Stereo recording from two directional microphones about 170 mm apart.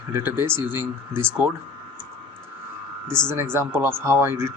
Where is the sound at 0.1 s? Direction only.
15° right (ahead or behind).